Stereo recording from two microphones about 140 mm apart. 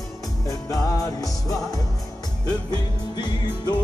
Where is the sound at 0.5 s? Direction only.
25° left (ahead or behind).